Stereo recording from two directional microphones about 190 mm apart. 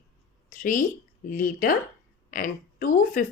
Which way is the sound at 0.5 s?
45° left (ahead or behind).